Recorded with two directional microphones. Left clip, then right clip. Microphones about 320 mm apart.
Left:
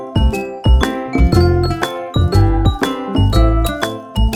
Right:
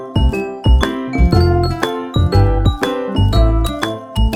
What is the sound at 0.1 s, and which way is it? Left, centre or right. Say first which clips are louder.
Music: right 1 dB; centre.